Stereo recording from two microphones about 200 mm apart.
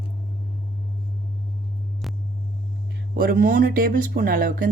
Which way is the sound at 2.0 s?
Centre (ahead or behind).